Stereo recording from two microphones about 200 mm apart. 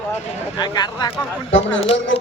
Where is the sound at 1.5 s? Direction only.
70° left (ahead or behind).